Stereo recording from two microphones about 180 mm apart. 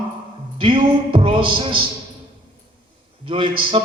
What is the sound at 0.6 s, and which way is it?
A man's voice, 30° right (ahead or behind).